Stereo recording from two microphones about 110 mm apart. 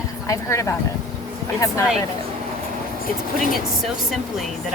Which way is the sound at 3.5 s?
Centre (ahead or behind).